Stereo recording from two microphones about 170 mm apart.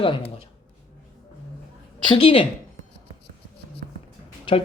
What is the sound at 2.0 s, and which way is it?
Speech, 30° left (ahead or behind).